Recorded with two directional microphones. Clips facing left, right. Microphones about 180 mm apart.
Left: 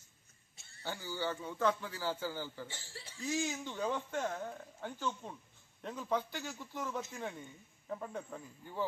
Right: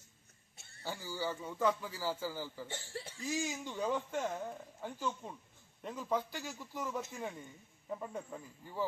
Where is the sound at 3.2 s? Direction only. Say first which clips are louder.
Left 2 dB; 5° right (ahead or behind).